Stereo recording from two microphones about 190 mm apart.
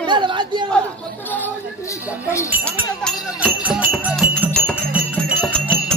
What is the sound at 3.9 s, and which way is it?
Music, 5° right (ahead or behind).